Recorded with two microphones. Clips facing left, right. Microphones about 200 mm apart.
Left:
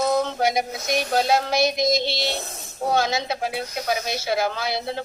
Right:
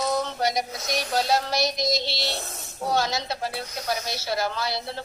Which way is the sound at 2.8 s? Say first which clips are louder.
Left 3 dB; 55° left (ahead or behind).